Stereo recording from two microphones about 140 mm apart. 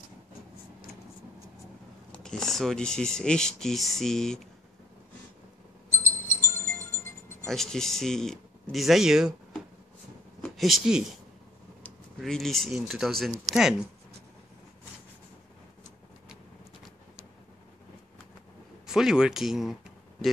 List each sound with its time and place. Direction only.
2.2 s speech: 5° left (ahead or behind)
6.2 s music: 20° left (ahead or behind)
7.4 s speech: 5° left (ahead or behind)
10.4 s speech: centre (ahead or behind)
12.2 s speech: centre (ahead or behind)
18.9 s speech: 5° right (ahead or behind)